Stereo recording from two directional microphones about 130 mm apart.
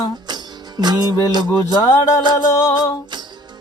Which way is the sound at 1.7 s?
25° left (ahead or behind).